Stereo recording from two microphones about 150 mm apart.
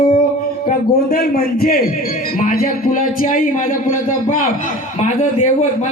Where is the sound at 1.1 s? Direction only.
85° left.